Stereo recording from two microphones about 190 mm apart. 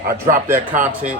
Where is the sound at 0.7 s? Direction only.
40° right (ahead or behind).